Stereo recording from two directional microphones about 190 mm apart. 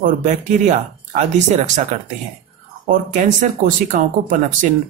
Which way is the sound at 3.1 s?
45° right (ahead or behind).